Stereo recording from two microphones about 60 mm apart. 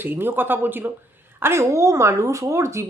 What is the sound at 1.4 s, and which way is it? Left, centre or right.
Speech, right.